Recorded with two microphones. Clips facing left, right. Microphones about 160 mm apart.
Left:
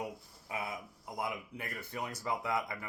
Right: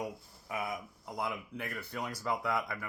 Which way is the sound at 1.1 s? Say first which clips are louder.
Right 1 dB; 15° left (ahead or behind).